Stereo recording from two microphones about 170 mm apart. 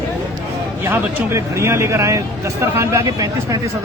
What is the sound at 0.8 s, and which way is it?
Speech, 15° right (ahead or behind).